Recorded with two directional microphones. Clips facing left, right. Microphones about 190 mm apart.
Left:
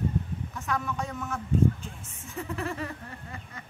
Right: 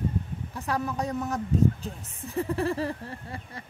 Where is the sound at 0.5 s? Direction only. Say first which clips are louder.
Right 3 dB; 35° right (ahead or behind).